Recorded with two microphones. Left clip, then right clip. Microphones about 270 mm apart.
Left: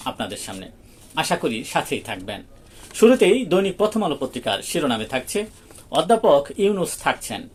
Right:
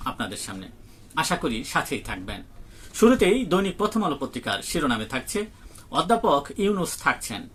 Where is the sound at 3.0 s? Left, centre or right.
Centre.